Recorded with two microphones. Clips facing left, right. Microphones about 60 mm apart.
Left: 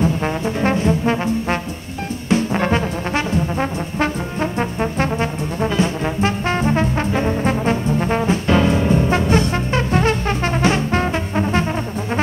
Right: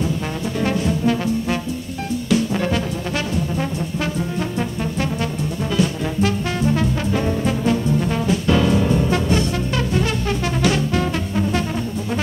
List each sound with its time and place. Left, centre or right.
0.0 s brass instrument: left